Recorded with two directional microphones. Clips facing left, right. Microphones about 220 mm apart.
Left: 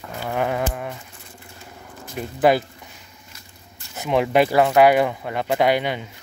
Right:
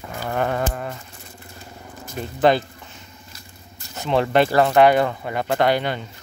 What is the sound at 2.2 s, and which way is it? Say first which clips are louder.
Speech: even; 5° left (ahead or behind).